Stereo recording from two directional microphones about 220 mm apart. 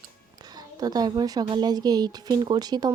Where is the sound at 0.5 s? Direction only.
15° right (ahead or behind).